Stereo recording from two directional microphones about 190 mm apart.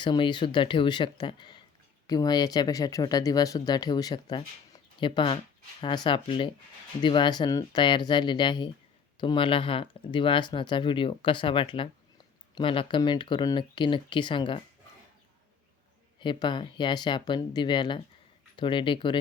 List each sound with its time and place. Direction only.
0.0 s speech: 25° left (ahead or behind)
16.2 s speech: 25° left (ahead or behind)